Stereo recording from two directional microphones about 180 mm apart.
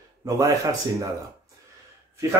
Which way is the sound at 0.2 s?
20° right (ahead or behind).